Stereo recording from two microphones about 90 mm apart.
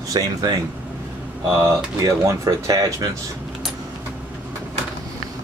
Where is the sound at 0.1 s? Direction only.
45° right (ahead or behind).